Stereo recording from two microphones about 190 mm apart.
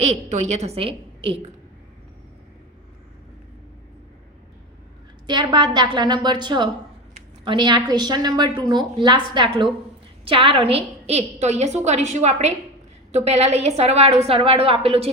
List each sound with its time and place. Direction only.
0.0 s a woman's voice: 35° right (ahead or behind)
5.2 s a woman's voice: 25° right (ahead or behind)